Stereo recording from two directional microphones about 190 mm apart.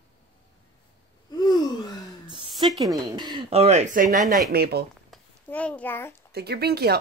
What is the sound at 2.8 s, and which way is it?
Speech, 20° right (ahead or behind).